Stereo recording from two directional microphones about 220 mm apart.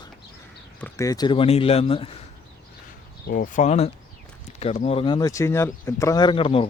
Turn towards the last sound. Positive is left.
turn(degrees=25)  # may be behind; listen again after turning